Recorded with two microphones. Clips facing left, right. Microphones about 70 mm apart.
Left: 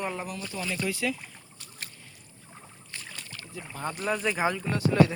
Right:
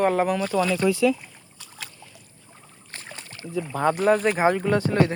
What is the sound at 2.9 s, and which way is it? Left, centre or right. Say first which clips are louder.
Boat: right 3 dB; right.